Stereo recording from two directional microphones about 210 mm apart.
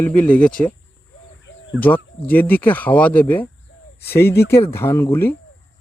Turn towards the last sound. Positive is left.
turn(degrees=10)  # may be behind; listen again after turning